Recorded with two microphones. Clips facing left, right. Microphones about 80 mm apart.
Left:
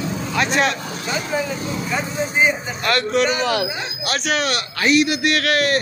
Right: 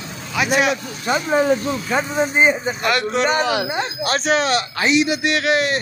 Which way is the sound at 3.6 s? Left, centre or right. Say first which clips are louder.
Right 4 dB; right.